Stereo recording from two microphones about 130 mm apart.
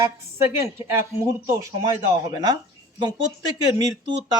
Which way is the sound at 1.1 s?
20° right (ahead or behind).